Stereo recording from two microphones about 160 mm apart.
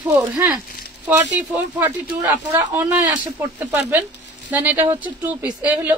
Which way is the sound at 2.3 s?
15° right (ahead or behind).